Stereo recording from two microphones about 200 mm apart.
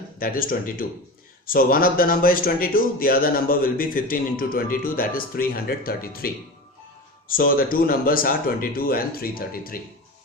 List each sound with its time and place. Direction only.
0.2 s speech: 45° left (ahead or behind)